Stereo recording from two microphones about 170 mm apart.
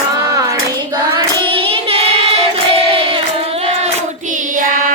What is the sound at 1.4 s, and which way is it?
Child singing, 30° right (ahead or behind).